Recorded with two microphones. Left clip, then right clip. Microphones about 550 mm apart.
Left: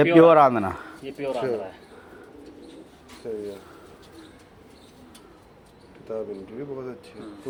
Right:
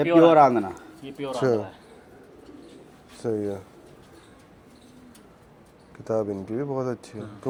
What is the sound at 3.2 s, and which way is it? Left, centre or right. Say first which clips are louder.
Speech: right 5 dB; right.